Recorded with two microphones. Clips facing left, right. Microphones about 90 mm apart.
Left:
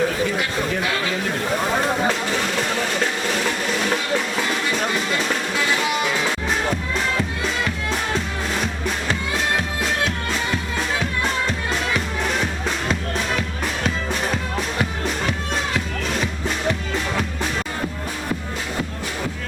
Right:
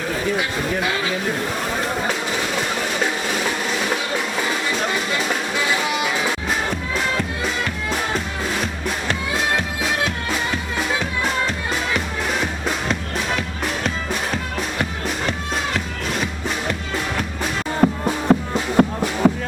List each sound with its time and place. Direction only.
17.8 s music: 60° right (ahead or behind)
19.2 s music: 75° right (ahead or behind)